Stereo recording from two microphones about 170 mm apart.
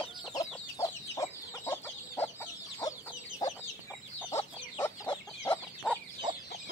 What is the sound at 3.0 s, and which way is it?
Chicken, 20° left (ahead or behind).